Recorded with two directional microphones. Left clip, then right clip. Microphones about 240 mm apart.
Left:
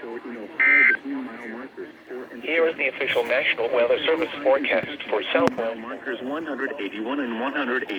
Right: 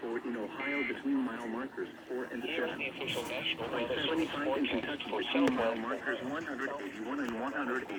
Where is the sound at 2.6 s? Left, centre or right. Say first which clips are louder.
Left 17 dB; left.